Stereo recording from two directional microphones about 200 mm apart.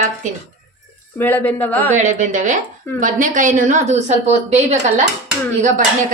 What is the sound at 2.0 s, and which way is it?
A woman's voice, 40° right (ahead or behind).